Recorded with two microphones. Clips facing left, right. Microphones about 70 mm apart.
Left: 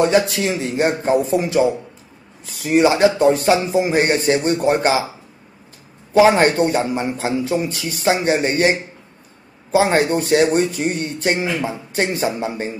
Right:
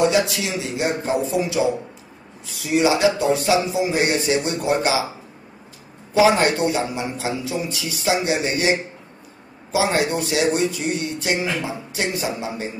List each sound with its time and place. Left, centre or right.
0.3 s speech: left
6.1 s speech: left